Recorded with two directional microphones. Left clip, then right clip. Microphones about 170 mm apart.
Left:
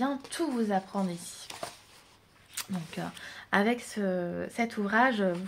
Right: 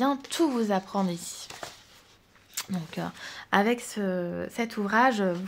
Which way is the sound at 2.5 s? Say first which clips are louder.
Right 3 dB; 30° right (ahead or behind).